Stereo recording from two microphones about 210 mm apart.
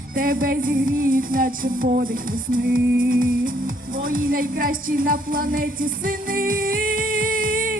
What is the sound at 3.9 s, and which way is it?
A woman's voice, 40° right (ahead or behind).